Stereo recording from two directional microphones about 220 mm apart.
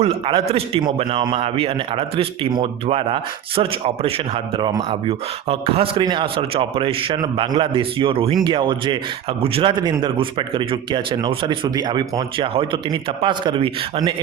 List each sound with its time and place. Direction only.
0.0 s speech: 25° right (ahead or behind)